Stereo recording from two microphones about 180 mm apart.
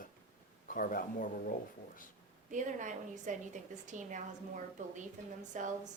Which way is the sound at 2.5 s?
45° right (ahead or behind).